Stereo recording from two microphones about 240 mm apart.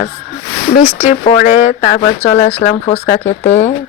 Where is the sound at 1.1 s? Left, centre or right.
Left.